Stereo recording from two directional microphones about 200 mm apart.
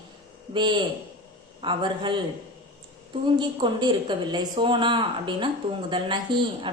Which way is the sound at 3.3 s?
20° right (ahead or behind).